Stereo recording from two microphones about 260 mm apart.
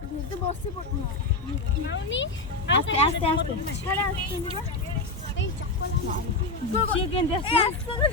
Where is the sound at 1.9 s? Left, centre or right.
Left.